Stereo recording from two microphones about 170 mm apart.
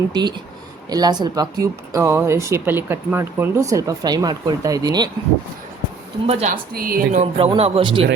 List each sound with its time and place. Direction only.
0.1 s speech: 25° right (ahead or behind)
6.2 s a man's voice: 35° right (ahead or behind)
6.5 s a woman's voice: 60° right (ahead or behind)
7.2 s a man's voice: 35° right (ahead or behind)